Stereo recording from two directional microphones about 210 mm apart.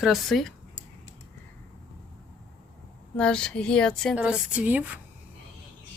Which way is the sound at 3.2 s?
5° left (ahead or behind).